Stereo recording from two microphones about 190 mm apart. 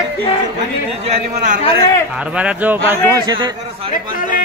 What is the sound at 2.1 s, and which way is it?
Speech, 5° right (ahead or behind).